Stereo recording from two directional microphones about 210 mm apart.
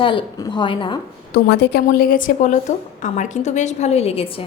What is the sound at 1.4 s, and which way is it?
A woman's voice, 45° left (ahead or behind).